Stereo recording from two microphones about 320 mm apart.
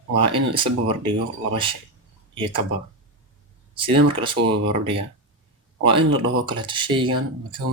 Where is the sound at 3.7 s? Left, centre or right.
Centre.